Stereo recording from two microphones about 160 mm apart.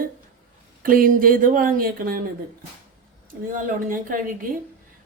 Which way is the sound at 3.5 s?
55° right (ahead or behind).